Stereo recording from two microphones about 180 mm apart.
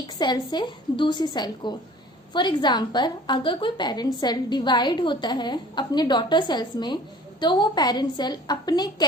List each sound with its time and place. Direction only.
0.2 s a woman's voice: 25° left (ahead or behind)